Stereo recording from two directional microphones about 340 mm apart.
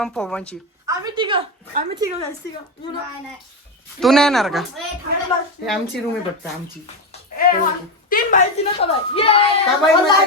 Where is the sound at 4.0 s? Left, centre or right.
Centre.